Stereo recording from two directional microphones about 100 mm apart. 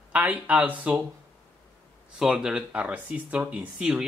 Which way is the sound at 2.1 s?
5° right (ahead or behind).